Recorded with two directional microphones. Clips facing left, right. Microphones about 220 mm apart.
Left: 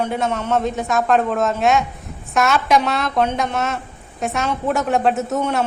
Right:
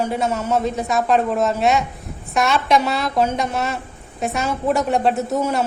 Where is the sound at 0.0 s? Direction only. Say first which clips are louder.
Even; 5° right (ahead or behind).